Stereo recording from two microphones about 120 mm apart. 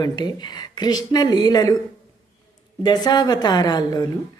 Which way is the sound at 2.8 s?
35° left (ahead or behind).